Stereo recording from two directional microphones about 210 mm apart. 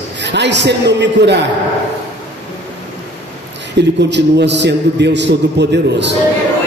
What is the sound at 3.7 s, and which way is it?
A man's voice, 55° right (ahead or behind).